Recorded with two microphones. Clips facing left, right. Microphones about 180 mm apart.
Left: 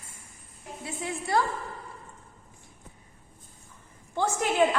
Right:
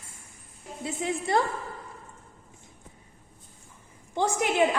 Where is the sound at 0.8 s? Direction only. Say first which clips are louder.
Right 4 dB; 20° right (ahead or behind).